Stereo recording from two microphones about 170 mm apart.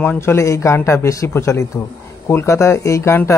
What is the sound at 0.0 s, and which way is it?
A man's voice, 15° left (ahead or behind).